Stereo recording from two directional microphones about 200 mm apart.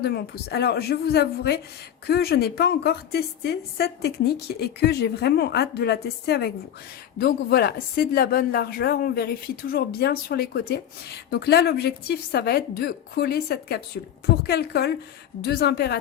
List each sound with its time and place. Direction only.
0.0 s a woman's voice: 55° left (ahead or behind)